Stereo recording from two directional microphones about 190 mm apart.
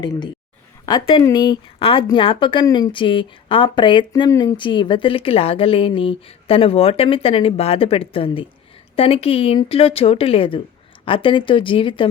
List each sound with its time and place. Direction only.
0.9 s speech: 25° left (ahead or behind)